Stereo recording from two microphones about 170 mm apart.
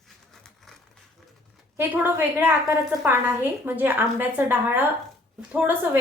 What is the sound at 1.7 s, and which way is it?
A woman's voice, 10° right (ahead or behind).